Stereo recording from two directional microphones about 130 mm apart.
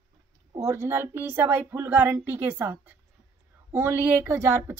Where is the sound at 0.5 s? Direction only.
25° right (ahead or behind).